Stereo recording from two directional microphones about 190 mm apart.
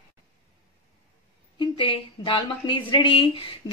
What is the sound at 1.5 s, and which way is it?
A woman's voice, 25° left (ahead or behind).